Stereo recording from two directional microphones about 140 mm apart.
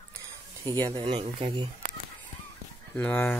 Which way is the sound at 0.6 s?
25° right (ahead or behind).